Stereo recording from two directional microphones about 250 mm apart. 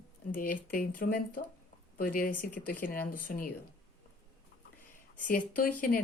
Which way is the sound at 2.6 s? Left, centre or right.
Left.